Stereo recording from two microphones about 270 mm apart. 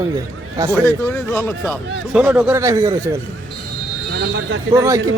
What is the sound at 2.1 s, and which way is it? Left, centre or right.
Speech, centre.